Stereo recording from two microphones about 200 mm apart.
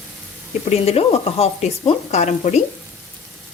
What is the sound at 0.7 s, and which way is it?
Sizzle, 30° left (ahead or behind).